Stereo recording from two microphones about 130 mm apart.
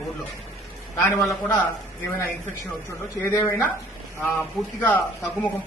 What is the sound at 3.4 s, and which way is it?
Speech, 20° left (ahead or behind).